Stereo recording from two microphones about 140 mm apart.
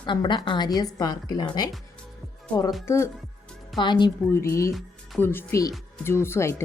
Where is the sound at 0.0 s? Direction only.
35° left (ahead or behind).